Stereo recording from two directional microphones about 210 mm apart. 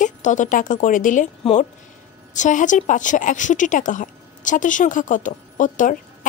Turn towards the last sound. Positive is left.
turn(degrees=40)  # may be behind; listen again after turning